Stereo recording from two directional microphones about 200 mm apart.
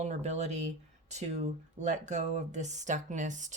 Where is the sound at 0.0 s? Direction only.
35° right (ahead or behind).